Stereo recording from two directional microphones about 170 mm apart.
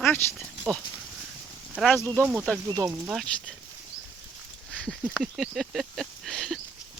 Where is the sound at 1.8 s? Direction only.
5° left (ahead or behind).